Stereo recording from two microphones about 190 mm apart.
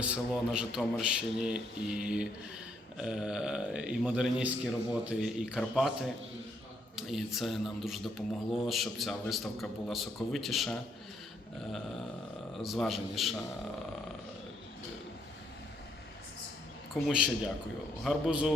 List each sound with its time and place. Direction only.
0.0 s speech: 5° right (ahead or behind)
12.6 s speech: centre (ahead or behind)
16.9 s speech: 5° right (ahead or behind)